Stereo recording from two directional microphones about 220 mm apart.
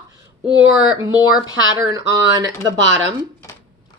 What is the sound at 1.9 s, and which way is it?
Speech, 15° right (ahead or behind).